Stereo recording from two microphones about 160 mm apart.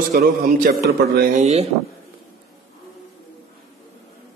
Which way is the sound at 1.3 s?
45° right (ahead or behind).